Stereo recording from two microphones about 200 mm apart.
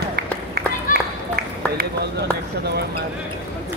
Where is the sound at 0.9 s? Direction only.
40° left (ahead or behind).